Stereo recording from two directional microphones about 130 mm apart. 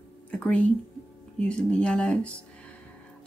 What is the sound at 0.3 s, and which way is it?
Speech, 10° left (ahead or behind).